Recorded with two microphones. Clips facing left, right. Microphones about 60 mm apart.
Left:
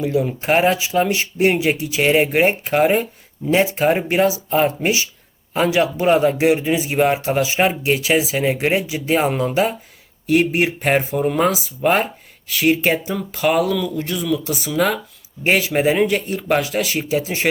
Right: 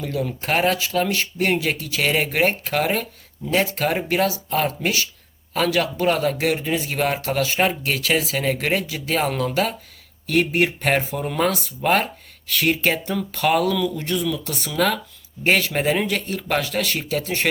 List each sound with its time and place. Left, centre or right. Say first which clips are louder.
0.0 s speech: left 6 dB; centre
10.4 s speech: left 2 dB; centre